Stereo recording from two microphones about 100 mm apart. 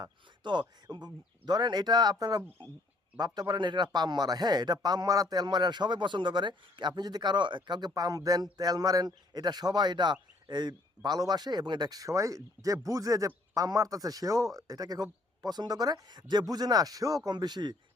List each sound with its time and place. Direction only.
0.0 s speech: 50° right (ahead or behind)
2.6 s speech: 55° right (ahead or behind)